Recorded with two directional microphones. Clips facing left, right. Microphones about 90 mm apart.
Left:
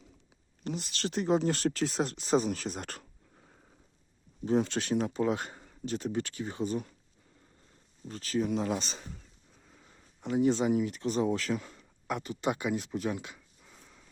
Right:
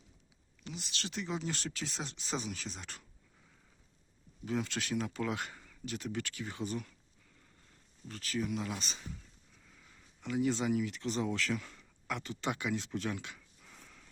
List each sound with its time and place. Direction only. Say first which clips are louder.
0.9 s speech: left 11 dB; 45° left (ahead or behind)
2.3 s a sound: left 11 dB; 45° left (ahead or behind)
4.4 s speech: left 8 dB; 35° left (ahead or behind)
5.1 s speech: left 7 dB; 25° left (ahead or behind)
8.0 s speech: left 6 dB; 30° left (ahead or behind)
9.7 s a sound: left 3 dB; 35° left (ahead or behind)
10.2 s speech: left 6 dB; 30° left (ahead or behind)